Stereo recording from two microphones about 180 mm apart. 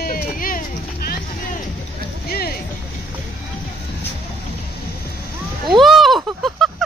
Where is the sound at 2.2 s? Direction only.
60° left (ahead or behind).